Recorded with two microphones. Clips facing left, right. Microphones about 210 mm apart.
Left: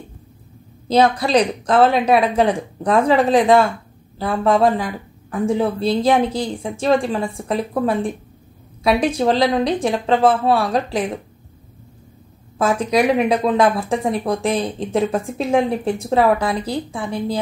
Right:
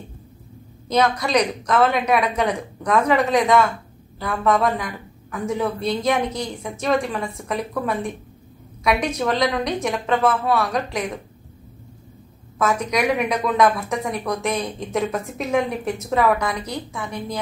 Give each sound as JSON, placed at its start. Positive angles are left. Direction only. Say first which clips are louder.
{"t": 0.8, "sound": "speech", "louder": "left 4 dB", "side_deg": 30}
{"t": 12.5, "sound": "speech", "louder": "left 4 dB", "side_deg": 30}